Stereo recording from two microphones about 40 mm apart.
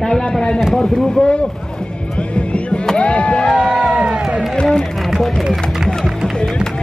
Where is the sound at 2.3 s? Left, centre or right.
Left.